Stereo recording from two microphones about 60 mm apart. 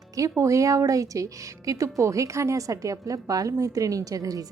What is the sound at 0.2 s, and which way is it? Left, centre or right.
A woman's voice, right.